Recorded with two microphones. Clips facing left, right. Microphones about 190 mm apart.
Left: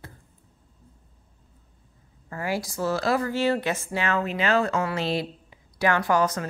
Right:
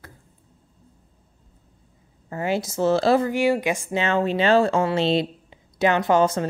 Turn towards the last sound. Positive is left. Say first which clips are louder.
# right 4 dB
turn(degrees=-25)  # may be behind; listen again after turning